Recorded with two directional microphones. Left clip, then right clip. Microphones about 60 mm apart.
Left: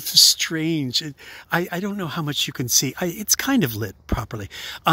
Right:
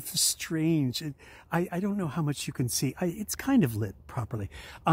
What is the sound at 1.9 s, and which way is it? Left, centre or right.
Speech, left.